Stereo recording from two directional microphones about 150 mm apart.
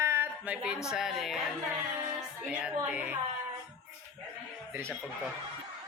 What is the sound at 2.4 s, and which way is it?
Speech, 5° right (ahead or behind).